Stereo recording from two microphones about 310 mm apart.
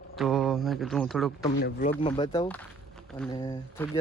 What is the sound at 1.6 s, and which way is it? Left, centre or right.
Speech, left.